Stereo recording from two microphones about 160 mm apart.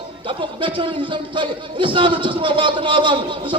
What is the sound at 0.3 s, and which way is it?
A man's voice, 30° right (ahead or behind).